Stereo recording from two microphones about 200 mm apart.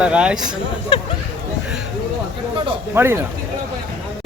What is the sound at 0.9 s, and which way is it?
Hubbub, 25° left (ahead or behind).